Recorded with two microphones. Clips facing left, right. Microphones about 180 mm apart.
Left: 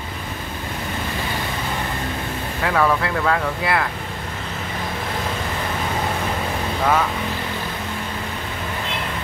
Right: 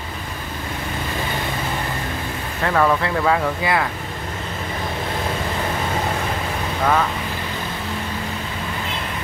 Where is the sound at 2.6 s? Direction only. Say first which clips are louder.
Right 1 dB; centre (ahead or behind).